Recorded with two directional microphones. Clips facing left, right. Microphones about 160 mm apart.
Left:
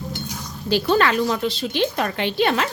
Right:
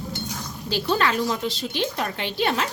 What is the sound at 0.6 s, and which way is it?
A woman's voice, 65° left (ahead or behind).